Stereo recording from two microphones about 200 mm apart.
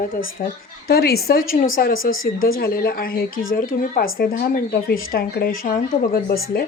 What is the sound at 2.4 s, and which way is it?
Speech, 45° left (ahead or behind).